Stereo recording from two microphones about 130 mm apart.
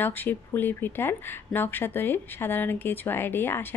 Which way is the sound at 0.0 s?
15° left (ahead or behind).